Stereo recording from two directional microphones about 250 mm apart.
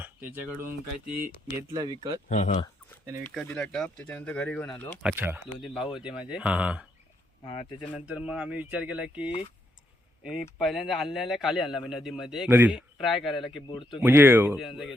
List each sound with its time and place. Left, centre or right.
0.0 s speech: centre
2.3 s speech: left
3.3 s speech: centre
5.0 s speech: centre
7.4 s speech: centre
7.8 s speech: centre
10.6 s speech: centre
13.7 s speech: centre
14.0 s speech: centre